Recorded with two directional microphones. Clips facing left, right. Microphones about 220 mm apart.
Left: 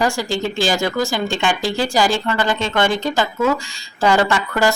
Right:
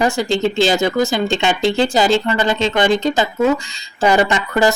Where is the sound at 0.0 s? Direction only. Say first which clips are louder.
Right 4 dB; 20° right (ahead or behind).